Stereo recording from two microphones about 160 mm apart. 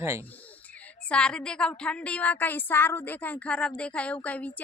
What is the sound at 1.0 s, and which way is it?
A woman's voice, 5° left (ahead or behind).